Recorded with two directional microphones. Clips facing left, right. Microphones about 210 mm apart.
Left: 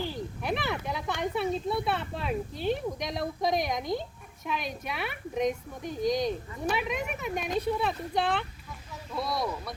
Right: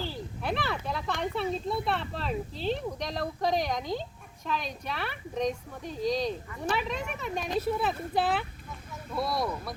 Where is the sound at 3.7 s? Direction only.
15° left (ahead or behind).